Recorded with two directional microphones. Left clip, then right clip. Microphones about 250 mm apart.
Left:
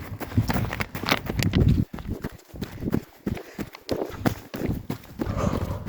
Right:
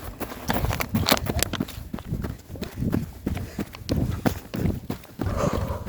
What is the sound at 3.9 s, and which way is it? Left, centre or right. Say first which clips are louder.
Run: left 2 dB; right.